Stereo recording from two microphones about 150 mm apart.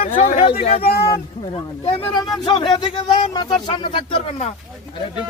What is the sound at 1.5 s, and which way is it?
Speech, 35° left (ahead or behind).